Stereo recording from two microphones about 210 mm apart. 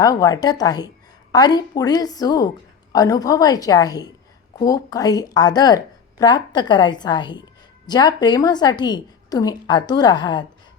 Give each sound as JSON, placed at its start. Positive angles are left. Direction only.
{"t": 0.0, "sound": "a woman's voice", "side_deg": 15}